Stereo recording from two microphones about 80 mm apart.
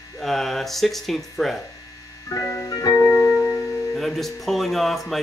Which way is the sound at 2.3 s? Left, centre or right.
Left.